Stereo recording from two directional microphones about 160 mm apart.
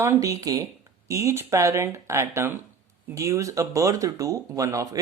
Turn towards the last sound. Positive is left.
turn(degrees=-20)  # may be behind; listen again after turning